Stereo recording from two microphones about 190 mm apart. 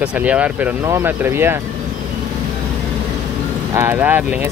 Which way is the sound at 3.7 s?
15° right (ahead or behind).